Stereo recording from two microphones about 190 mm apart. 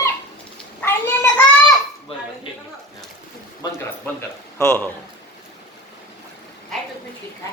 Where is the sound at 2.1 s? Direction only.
30° left (ahead or behind).